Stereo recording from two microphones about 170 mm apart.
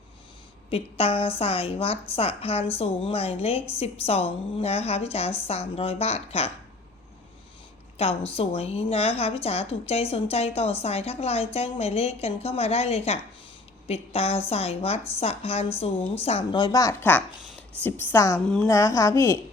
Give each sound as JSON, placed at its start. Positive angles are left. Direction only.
{"t": 0.7, "sound": "a woman's voice", "side_deg": 35}
{"t": 7.9, "sound": "a woman's voice", "side_deg": 35}
{"t": 18.4, "sound": "a woman's voice", "side_deg": 5}
{"t": 18.7, "sound": "a woman's voice", "side_deg": 15}